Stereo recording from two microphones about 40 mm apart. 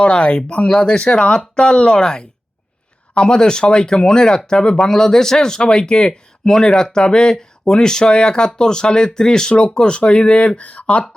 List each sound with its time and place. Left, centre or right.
0.0 s speech: left
10.6 s speech: left